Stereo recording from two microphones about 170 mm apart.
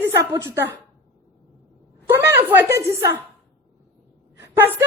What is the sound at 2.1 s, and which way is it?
Speech, 15° right (ahead or behind).